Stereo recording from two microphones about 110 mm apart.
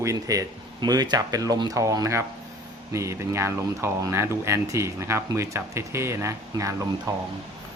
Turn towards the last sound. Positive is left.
turn(degrees=-35)  # may be behind; listen again after turning